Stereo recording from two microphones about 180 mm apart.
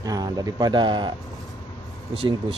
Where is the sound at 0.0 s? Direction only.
20° right (ahead or behind).